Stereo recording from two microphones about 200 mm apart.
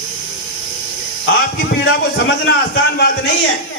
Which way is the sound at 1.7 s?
55° left (ahead or behind).